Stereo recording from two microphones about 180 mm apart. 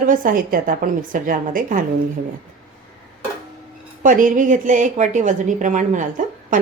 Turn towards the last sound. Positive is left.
turn(degrees=-45)  # may be behind; listen again after turning